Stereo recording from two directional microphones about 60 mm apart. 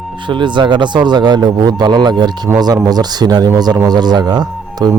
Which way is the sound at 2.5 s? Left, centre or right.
Right.